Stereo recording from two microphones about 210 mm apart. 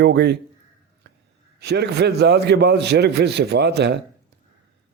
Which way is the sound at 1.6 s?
50° right (ahead or behind).